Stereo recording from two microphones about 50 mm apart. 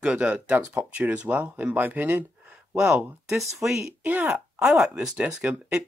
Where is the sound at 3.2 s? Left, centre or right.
Centre.